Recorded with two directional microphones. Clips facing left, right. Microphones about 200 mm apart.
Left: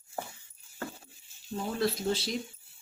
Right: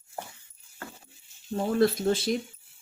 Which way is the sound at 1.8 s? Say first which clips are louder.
Right 6 dB; 50° right (ahead or behind).